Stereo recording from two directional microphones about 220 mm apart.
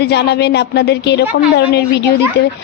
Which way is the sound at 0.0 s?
50° left (ahead or behind).